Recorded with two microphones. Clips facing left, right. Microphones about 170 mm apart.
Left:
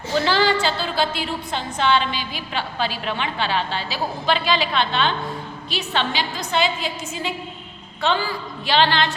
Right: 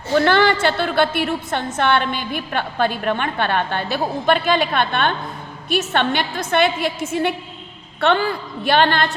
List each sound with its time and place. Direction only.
0.1 s a woman's voice: 60° right (ahead or behind)